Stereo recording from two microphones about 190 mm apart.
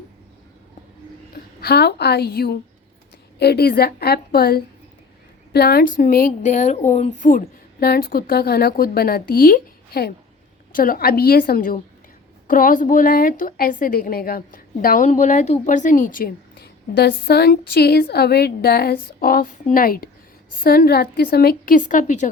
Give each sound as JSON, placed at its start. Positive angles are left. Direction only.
{"t": 1.6, "sound": "a woman's voice", "side_deg": 60}